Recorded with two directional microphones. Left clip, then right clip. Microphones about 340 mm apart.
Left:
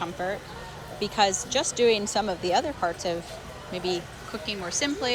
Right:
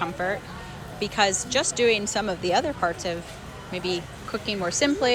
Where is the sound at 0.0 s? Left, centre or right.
Centre.